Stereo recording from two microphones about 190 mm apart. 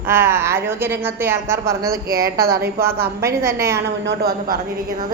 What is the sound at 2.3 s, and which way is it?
Speech, 55° right (ahead or behind).